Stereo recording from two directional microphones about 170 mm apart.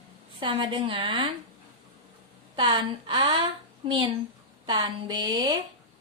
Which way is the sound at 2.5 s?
30° right (ahead or behind).